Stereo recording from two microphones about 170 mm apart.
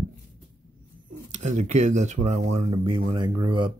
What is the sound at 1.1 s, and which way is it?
Speech, 45° right (ahead or behind).